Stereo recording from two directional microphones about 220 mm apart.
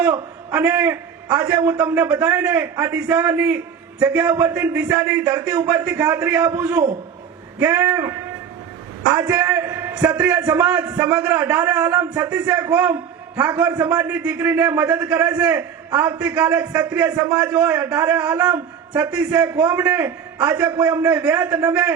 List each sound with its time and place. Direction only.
0.5 s a man's voice: 5° right (ahead or behind)